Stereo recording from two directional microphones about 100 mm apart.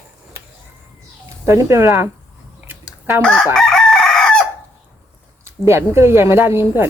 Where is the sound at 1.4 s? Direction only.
30° right (ahead or behind).